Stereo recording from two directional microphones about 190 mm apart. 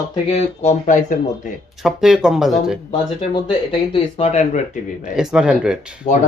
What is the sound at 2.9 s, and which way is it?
Speech, 25° left (ahead or behind).